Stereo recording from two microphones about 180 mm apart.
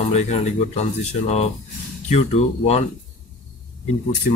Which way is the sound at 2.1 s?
35° left (ahead or behind).